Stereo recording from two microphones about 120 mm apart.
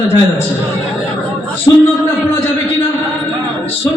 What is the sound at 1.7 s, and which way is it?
Speech, 30° left (ahead or behind).